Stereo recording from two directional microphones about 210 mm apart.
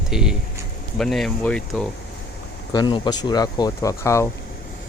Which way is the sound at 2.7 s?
20° left (ahead or behind).